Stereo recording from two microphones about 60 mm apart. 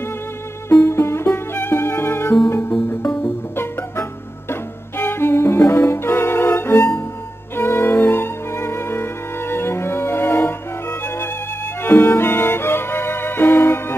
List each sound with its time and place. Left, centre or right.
0.7 s music: left
11.9 s music: left
12.2 s music: left